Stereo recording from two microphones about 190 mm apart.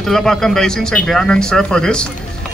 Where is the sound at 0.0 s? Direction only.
Centre (ahead or behind).